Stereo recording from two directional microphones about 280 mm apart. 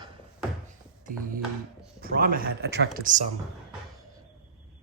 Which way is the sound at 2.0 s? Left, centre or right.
Right.